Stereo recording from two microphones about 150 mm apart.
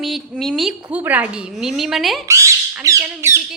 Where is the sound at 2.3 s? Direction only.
20° right (ahead or behind).